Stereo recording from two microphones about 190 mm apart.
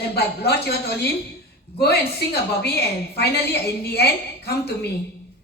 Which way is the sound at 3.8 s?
55° left (ahead or behind).